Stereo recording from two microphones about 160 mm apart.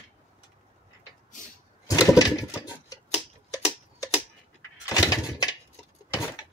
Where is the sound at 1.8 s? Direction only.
20° left (ahead or behind).